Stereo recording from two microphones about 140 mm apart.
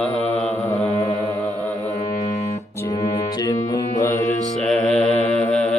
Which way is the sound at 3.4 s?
25° left (ahead or behind).